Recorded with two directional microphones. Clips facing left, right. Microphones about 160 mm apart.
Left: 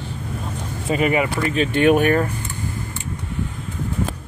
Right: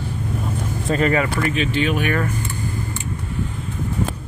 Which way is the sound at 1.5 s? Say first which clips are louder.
Left 5 dB; 45° left (ahead or behind).